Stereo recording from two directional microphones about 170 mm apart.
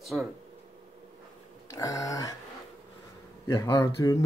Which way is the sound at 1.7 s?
20° left (ahead or behind).